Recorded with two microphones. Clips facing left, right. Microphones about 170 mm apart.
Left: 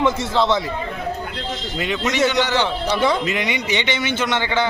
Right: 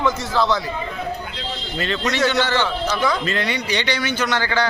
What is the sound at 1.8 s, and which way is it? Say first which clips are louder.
A man's voice: left 1 dB; 15° left (ahead or behind).